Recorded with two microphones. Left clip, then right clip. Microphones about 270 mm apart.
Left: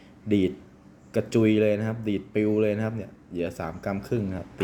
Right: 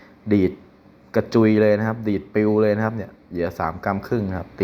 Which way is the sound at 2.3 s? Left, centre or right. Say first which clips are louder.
Right 6 dB; centre.